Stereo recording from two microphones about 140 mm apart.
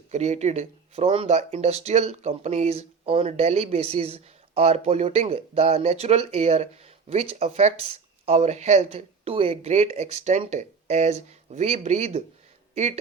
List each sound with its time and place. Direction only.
0.1 s speech: 55° right (ahead or behind)